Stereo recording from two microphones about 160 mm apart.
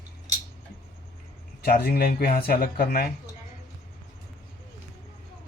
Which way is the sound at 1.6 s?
70° left (ahead or behind).